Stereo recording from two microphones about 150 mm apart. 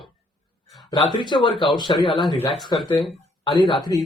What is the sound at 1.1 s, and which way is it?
A man's voice, 30° left (ahead or behind).